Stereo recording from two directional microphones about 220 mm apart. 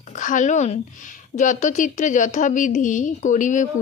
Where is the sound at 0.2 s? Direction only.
35° left (ahead or behind).